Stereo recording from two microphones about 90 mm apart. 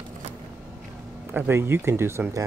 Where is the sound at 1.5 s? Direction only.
30° right (ahead or behind).